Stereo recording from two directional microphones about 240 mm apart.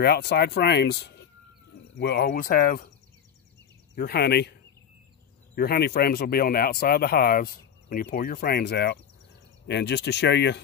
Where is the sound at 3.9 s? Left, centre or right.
Left.